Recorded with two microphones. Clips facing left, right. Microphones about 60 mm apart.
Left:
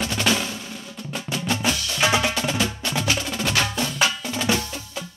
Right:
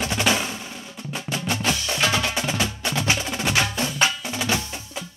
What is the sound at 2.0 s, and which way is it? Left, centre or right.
Percussion, centre.